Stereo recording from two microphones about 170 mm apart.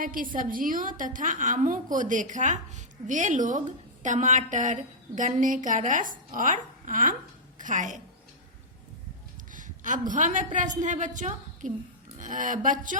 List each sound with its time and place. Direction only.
0.0 s a woman's voice: 55° right (ahead or behind)
9.5 s a woman's voice: 50° right (ahead or behind)